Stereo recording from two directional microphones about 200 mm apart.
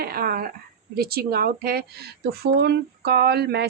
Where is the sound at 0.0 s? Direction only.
50° right (ahead or behind).